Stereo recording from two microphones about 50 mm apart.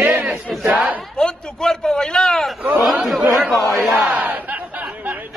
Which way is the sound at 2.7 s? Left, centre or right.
Centre.